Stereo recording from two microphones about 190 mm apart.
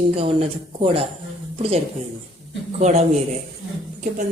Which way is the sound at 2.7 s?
35° right (ahead or behind).